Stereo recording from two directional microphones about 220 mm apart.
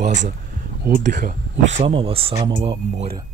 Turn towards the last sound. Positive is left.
turn(degrees=-25)  # may be behind; listen again after turning